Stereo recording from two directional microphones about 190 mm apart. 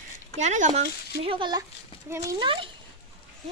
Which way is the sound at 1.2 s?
25° right (ahead or behind).